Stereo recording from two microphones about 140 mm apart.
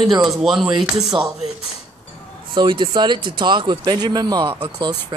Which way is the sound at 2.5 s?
35° right (ahead or behind).